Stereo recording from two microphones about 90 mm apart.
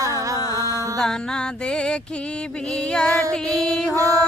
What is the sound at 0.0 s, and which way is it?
Music, 40° right (ahead or behind).